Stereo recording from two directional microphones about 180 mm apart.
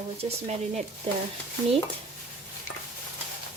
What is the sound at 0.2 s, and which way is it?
Speech, 35° right (ahead or behind).